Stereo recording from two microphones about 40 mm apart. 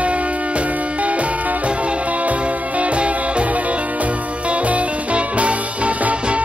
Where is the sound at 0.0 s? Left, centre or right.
Right.